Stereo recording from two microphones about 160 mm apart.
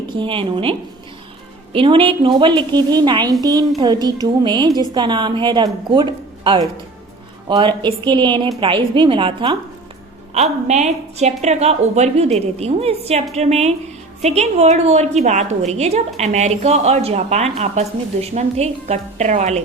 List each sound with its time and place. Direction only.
0.2 s a woman's voice: 30° right (ahead or behind)
10.7 s a woman's voice: 45° right (ahead or behind)